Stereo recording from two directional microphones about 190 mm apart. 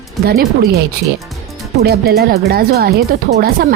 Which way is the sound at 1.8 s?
55° right (ahead or behind).